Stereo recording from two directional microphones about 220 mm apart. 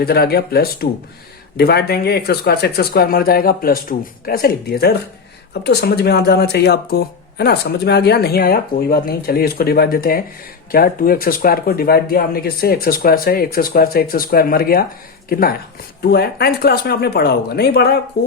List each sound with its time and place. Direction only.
0.0 s speech: 45° left (ahead or behind)